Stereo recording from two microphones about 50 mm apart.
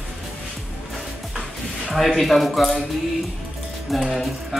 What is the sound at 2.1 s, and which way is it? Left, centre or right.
Music, centre.